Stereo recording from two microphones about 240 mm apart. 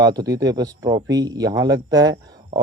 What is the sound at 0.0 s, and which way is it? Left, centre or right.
Speech, centre.